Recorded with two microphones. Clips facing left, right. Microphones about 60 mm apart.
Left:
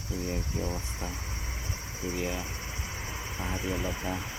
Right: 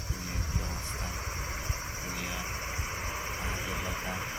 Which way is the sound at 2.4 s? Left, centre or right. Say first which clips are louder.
Right 2 dB; right.